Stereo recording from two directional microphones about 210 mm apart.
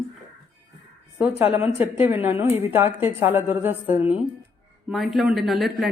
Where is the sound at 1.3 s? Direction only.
10° right (ahead or behind).